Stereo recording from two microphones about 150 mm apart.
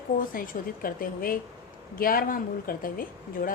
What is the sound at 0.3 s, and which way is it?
A woman's voice, 70° left (ahead or behind).